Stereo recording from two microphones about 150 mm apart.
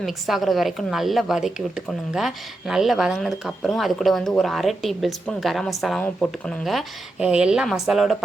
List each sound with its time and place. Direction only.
0.0 s a woman's voice: centre (ahead or behind)